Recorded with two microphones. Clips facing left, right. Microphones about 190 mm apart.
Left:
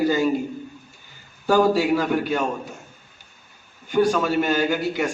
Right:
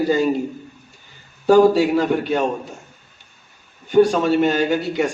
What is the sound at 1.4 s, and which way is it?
A man's voice, 25° right (ahead or behind).